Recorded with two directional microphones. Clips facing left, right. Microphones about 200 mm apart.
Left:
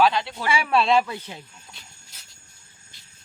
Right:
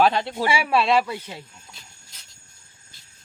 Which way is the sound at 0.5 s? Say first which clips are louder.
Left 1 dB; 10° right (ahead or behind).